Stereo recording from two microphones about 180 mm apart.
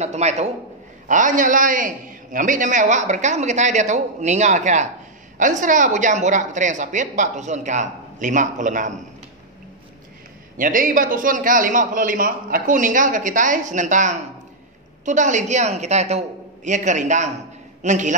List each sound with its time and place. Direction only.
0.0 s a woman's voice: 40° right (ahead or behind)
10.6 s a man's voice: 50° right (ahead or behind)